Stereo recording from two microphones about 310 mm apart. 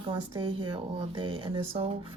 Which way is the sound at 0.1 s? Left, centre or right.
Centre.